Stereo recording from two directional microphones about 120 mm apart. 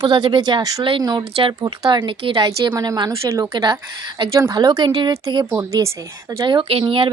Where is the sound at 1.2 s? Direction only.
55° right (ahead or behind).